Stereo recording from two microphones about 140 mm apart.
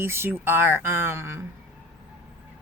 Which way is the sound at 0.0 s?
15° right (ahead or behind).